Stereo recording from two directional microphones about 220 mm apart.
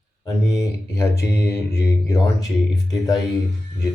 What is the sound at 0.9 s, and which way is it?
Speech, 10° left (ahead or behind).